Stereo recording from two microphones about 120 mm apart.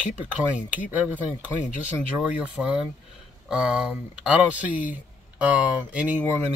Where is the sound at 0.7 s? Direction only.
10° right (ahead or behind).